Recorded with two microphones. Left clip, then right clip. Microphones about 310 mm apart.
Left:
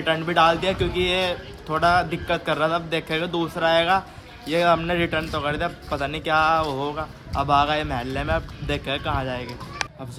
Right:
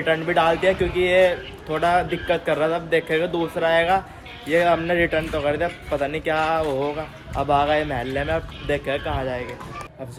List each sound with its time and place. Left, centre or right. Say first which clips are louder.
0.0 s a man's voice: even; centre